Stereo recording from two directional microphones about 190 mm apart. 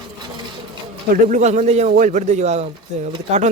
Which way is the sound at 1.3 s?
40° right (ahead or behind).